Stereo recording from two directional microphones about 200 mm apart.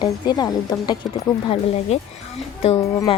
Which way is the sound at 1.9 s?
35° left (ahead or behind).